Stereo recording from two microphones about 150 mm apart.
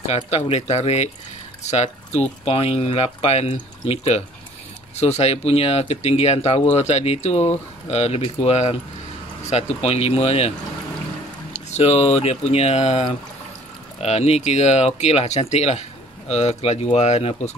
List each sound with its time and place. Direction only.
0.1 s speech: 45° left (ahead or behind)
11.7 s speech: 45° left (ahead or behind)